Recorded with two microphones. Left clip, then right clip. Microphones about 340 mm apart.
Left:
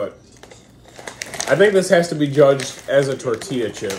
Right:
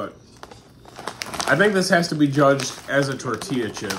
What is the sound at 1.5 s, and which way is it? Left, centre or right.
Speech, centre.